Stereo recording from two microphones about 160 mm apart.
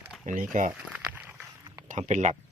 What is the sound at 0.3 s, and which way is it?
Speech, 55° right (ahead or behind).